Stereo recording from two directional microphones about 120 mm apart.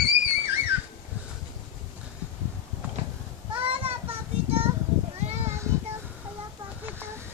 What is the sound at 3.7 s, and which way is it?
Child singing, 50° right (ahead or behind).